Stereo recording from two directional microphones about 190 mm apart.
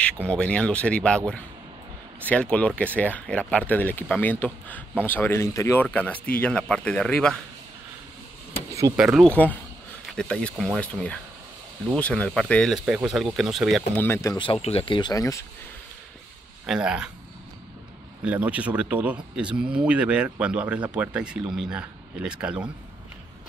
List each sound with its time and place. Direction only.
0.0 s speech: 5° left (ahead or behind)
8.9 s speech: 5° right (ahead or behind)
14.0 s speech: 15° left (ahead or behind)
16.6 s speech: 5° right (ahead or behind)
18.2 s speech: 5° right (ahead or behind)